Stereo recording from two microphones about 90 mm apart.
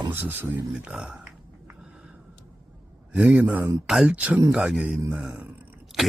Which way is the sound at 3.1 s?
10° right (ahead or behind).